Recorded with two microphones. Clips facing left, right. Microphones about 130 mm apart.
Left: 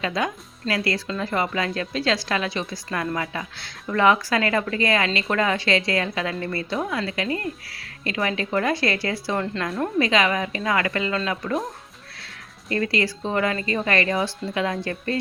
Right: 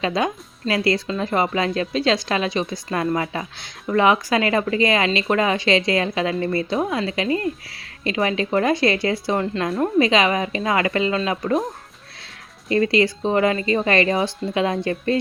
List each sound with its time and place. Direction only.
0.0 s a woman's voice: 25° right (ahead or behind)
12.6 s a woman's voice: 25° right (ahead or behind)